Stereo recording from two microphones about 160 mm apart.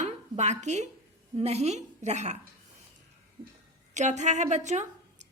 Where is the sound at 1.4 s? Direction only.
40° right (ahead or behind).